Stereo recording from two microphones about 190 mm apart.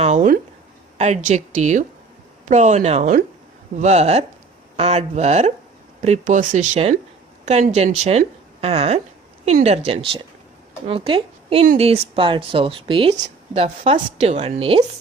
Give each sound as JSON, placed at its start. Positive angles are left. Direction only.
{"t": 0.0, "sound": "a woman's voice", "side_deg": -40}